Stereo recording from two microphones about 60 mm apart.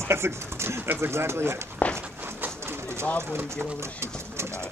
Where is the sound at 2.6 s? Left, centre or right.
Right.